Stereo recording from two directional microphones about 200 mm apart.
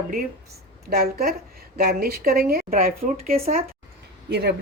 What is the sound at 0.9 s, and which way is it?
Speech, 50° right (ahead or behind).